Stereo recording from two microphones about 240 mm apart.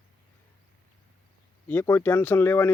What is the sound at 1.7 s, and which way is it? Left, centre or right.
Speech, centre.